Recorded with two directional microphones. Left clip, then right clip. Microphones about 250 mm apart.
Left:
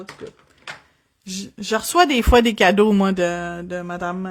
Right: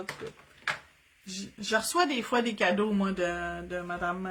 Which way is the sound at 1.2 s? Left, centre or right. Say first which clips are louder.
Left 8 dB; left.